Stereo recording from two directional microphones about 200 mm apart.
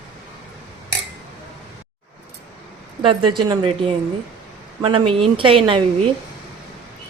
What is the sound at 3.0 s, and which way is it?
Speech, 25° right (ahead or behind).